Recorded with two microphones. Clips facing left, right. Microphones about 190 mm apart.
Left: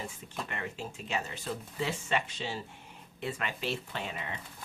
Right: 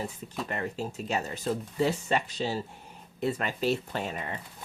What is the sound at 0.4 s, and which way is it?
Speech, 40° right (ahead or behind).